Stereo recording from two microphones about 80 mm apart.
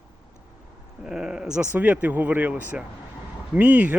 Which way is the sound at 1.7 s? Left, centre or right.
Right.